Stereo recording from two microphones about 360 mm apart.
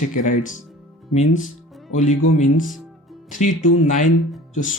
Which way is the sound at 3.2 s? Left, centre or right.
Left.